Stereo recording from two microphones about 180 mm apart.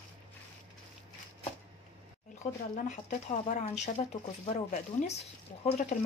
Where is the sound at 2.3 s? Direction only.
40° left (ahead or behind).